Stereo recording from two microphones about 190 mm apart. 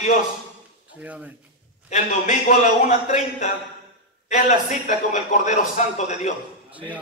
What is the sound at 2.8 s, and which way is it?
A man's voice, 40° left (ahead or behind).